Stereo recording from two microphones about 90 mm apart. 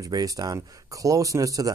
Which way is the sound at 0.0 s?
45° right (ahead or behind).